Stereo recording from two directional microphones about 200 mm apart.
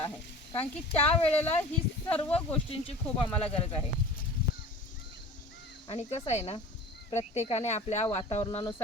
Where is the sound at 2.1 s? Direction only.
5° left (ahead or behind).